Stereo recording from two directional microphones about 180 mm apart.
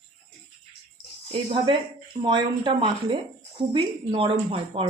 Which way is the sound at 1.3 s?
30° right (ahead or behind).